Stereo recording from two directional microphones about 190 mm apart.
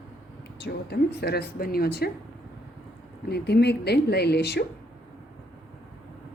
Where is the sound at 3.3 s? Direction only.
60° left (ahead or behind).